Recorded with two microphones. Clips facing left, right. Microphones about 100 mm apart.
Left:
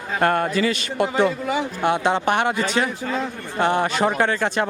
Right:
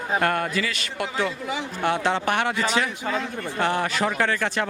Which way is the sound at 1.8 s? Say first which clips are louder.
Left 2 dB; 15° left (ahead or behind).